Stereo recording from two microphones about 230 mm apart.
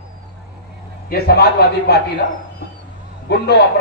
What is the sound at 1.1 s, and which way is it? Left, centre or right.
Speech, left.